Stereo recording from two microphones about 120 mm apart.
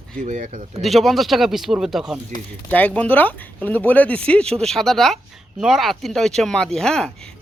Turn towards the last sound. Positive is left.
turn(degrees=5)  # may be behind; listen again after turning